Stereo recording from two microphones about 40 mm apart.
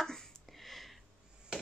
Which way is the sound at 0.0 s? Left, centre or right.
Centre.